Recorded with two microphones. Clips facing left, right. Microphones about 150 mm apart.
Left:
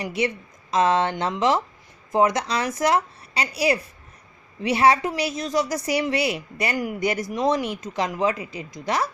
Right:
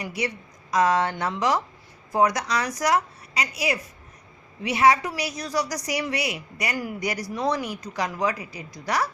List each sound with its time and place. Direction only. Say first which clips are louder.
0.0 s speech: left 4 dB; 25° left (ahead or behind)